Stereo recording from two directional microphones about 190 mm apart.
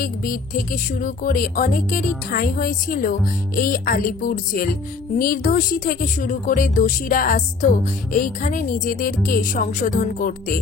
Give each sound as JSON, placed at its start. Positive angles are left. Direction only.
{"t": 0.0, "sound": "a woman's voice", "side_deg": 50}